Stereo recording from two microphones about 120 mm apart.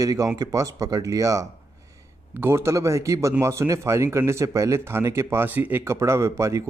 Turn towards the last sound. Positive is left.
turn(degrees=-25)  # may be behind; listen again after turning